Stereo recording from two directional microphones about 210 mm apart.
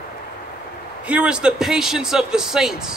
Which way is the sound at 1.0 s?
5° right (ahead or behind).